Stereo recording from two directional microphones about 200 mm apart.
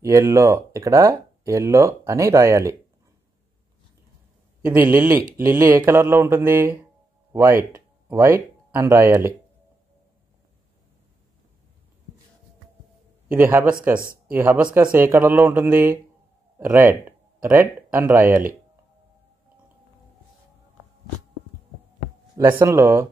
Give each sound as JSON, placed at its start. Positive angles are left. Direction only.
{"t": 0.0, "sound": "speech", "side_deg": -15}
{"t": 4.6, "sound": "speech", "side_deg": -10}
{"t": 13.3, "sound": "speech", "side_deg": -10}
{"t": 14.0, "sound": "a sound", "side_deg": -45}
{"t": 14.3, "sound": "speech", "side_deg": -10}
{"t": 22.6, "sound": "speech", "side_deg": -10}